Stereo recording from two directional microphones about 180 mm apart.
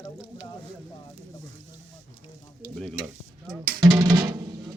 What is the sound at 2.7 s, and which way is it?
Stir, 5° left (ahead or behind).